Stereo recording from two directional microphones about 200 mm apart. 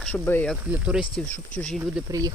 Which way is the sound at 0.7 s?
5° right (ahead or behind).